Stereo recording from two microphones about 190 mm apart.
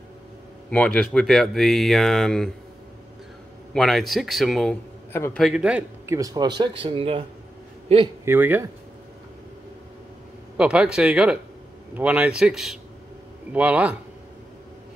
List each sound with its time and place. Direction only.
0.7 s speech: 5° left (ahead or behind)
3.7 s speech: centre (ahead or behind)
5.1 s a man's voice: 10° left (ahead or behind)
5.4 s a man's voice: 5° right (ahead or behind)
6.1 s a man's voice: 20° right (ahead or behind)
8.3 s a man's voice: 10° right (ahead or behind)
10.6 s a man's voice: 5° right (ahead or behind)